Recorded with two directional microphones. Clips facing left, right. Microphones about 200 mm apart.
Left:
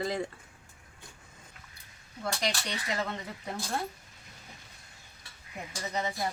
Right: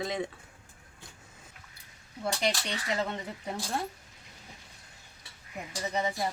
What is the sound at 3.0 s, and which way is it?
Speech, 20° right (ahead or behind).